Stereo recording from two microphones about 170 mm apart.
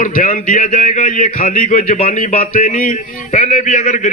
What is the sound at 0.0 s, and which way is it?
A man's voice, 50° left (ahead or behind).